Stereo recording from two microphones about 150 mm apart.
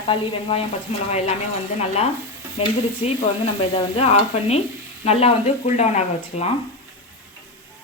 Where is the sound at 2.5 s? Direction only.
40° left (ahead or behind).